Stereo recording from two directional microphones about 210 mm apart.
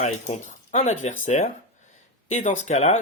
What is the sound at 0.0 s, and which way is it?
Speech, 35° left (ahead or behind).